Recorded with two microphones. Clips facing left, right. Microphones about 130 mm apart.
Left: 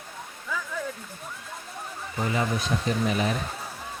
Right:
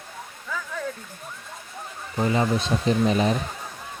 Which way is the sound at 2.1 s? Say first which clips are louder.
Right 5 dB; 30° right (ahead or behind).